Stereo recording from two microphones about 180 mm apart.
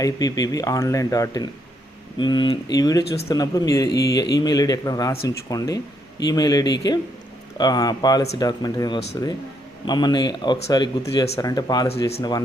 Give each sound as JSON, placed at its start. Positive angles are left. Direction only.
{"t": 0.0, "sound": "a man's voice", "side_deg": 20}